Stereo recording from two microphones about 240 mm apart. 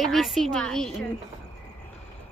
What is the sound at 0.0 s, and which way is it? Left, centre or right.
Speech, centre.